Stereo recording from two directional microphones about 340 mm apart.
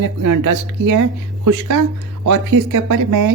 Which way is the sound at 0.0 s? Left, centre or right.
Right.